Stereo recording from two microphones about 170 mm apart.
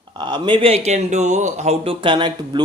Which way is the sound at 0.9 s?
45° right (ahead or behind).